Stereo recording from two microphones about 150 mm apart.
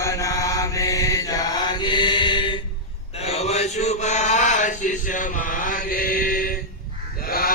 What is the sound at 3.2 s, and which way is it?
Mantra, 45° left (ahead or behind).